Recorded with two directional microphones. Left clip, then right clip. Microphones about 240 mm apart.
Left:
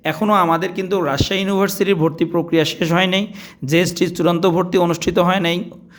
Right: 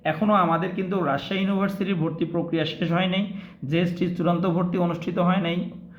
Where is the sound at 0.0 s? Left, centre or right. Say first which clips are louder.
Left 5 dB; left.